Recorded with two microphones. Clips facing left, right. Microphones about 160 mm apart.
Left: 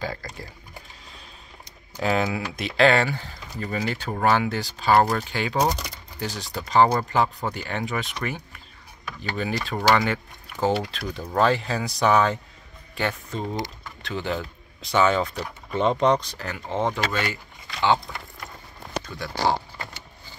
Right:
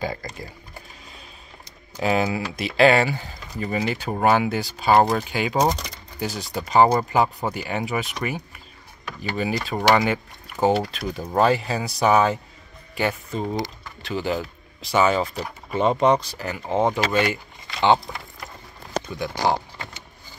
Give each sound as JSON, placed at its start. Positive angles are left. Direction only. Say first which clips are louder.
{"t": 0.0, "sound": "speech", "louder": "right 3 dB", "side_deg": -15}
{"t": 2.0, "sound": "speech", "louder": "right 2 dB", "side_deg": -5}
{"t": 9.4, "sound": "speech", "louder": "right 2 dB", "side_deg": -10}
{"t": 19.0, "sound": "speech", "louder": "right 5 dB", "side_deg": -20}